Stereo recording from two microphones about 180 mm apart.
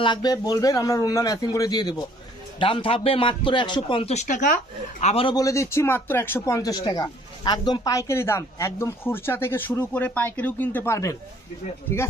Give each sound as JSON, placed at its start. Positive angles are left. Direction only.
{"t": 0.0, "sound": "a man's voice", "side_deg": 25}